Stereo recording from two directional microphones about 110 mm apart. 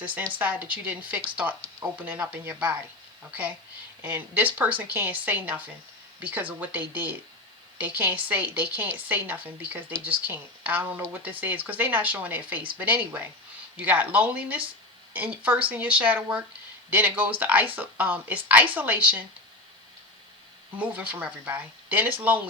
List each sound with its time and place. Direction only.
0.0 s a woman's voice: 15° right (ahead or behind)
4.0 s a woman's voice: 15° right (ahead or behind)
20.7 s a woman's voice: 15° right (ahead or behind)